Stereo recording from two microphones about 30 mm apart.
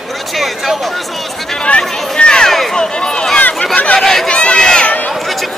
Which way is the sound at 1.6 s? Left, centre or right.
Left.